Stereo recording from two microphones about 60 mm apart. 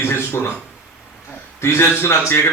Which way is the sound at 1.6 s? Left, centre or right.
Left.